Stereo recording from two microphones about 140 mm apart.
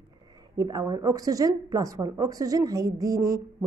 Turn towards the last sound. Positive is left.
turn(degrees=-25)  # may be behind; listen again after turning